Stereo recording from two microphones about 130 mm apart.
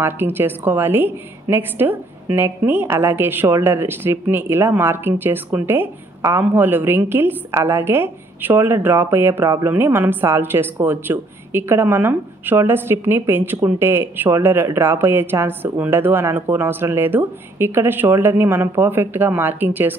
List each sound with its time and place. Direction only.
0.0 s speech: 15° right (ahead or behind)